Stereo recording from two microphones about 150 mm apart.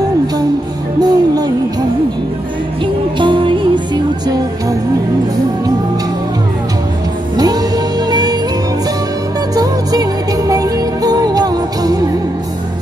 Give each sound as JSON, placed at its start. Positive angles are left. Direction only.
{"t": 1.0, "sound": "music", "side_deg": -25}
{"t": 3.2, "sound": "music", "side_deg": -35}
{"t": 7.3, "sound": "music", "side_deg": -25}
{"t": 10.5, "sound": "music", "side_deg": -25}